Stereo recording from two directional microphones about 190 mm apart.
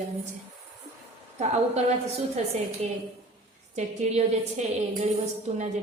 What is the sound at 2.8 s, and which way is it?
A woman's voice, 35° right (ahead or behind).